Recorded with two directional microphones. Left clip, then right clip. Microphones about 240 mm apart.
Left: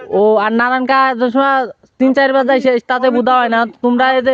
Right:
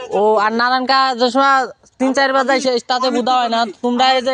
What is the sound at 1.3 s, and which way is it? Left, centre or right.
Speech, left.